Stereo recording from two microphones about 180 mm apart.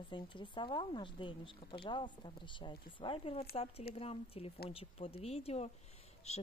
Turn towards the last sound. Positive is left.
turn(degrees=35)  # may be behind; listen again after turning